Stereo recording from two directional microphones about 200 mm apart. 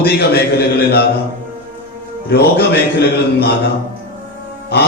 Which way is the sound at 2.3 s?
50° left (ahead or behind).